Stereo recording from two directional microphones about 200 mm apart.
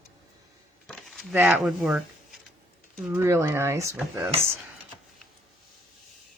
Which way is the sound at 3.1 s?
15° right (ahead or behind).